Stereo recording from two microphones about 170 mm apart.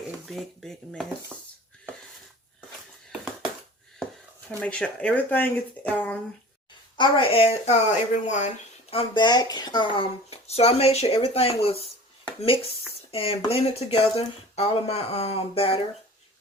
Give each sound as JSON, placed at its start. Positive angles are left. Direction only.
{"t": 0.3, "sound": "speech", "side_deg": 0}
{"t": 4.6, "sound": "speech", "side_deg": 5}
{"t": 6.9, "sound": "speech", "side_deg": 30}
{"t": 13.1, "sound": "speech", "side_deg": 35}